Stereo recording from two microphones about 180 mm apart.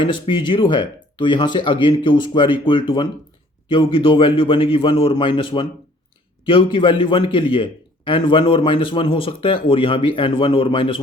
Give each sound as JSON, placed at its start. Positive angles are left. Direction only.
{"t": 0.0, "sound": "a man's voice", "side_deg": 25}